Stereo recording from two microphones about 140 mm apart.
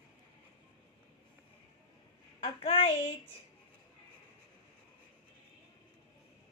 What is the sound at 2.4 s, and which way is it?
Child singing, 50° left (ahead or behind).